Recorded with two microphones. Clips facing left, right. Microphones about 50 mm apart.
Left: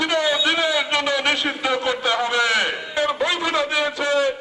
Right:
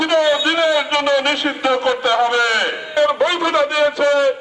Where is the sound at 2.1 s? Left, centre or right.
Centre.